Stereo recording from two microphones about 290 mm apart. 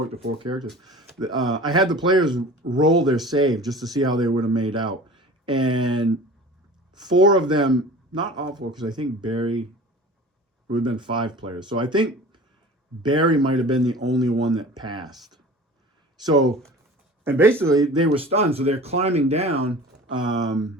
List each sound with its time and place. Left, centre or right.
0.1 s speech: centre
3.7 s speech: centre
3.9 s speech: centre
10.7 s speech: centre
16.5 s speech: centre
18.1 s speech: centre